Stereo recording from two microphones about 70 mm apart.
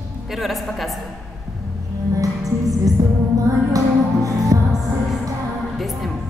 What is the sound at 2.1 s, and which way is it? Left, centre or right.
Music, right.